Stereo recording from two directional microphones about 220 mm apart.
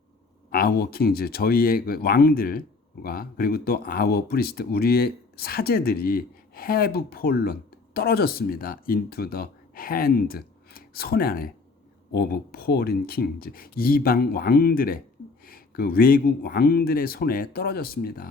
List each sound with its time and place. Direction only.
0.5 s speech: 45° left (ahead or behind)